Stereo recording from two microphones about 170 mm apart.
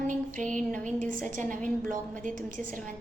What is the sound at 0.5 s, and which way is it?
Speech, 5° left (ahead or behind).